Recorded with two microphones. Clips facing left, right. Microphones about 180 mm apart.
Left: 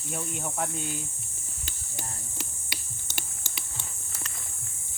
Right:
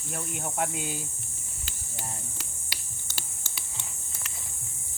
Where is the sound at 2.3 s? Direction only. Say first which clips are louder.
Left 4 dB; 15° left (ahead or behind).